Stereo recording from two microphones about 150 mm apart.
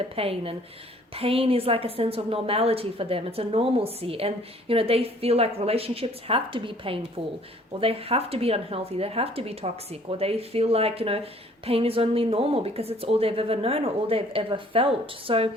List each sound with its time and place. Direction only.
0.2 s speech: 40° right (ahead or behind)